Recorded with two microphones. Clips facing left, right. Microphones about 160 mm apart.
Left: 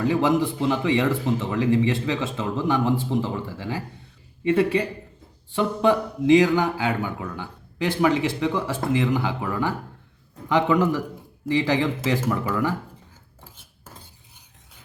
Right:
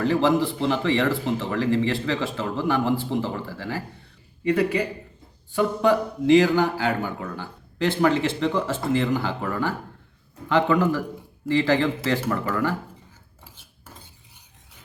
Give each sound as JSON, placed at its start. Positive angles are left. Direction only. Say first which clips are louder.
{"t": 0.0, "sound": "speech", "louder": "even", "side_deg": 15}
{"t": 4.4, "sound": "a man's voice", "louder": "left 1 dB", "side_deg": 25}